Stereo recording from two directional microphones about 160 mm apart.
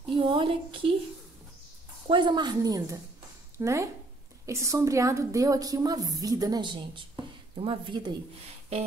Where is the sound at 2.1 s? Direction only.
30° right (ahead or behind).